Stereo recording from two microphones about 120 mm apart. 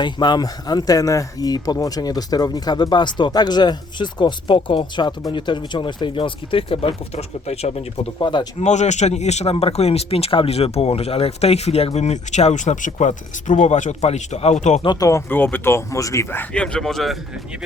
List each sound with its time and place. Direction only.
0.0 s speech: 40° left (ahead or behind); by 8.1 s 60° left (ahead or behind)
8.2 s speech: 40° left (ahead or behind)
8.5 s speech: 75° left (ahead or behind)
14.8 s speech: 30° left (ahead or behind)
15.3 s speech: 15° left (ahead or behind); by 17.2 s centre (ahead or behind)